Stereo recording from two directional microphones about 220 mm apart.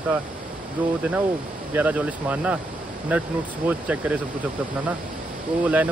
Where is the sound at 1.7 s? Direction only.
5° right (ahead or behind).